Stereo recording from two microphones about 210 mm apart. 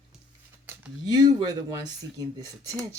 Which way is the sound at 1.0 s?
20° right (ahead or behind).